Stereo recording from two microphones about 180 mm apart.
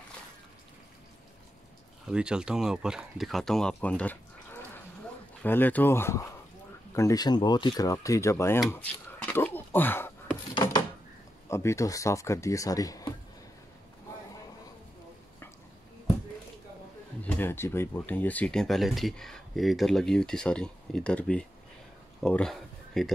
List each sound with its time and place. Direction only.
2.0 s speech: 5° right (ahead or behind); by 10.1 s 10° left (ahead or behind)
11.4 s speech: 15° left (ahead or behind)
17.2 s speech: 10° left (ahead or behind)